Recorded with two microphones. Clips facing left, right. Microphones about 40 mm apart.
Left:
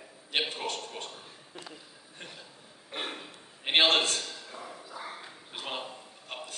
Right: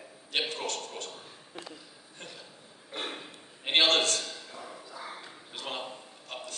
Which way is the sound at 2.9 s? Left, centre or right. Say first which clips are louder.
Even; left.